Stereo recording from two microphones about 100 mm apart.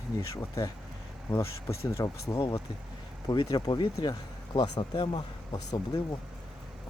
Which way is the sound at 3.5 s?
45° left (ahead or behind).